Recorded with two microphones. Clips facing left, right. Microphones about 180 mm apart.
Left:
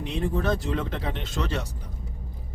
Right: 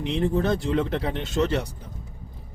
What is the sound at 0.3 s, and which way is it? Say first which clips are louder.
Speech: right 2 dB; 25° right (ahead or behind).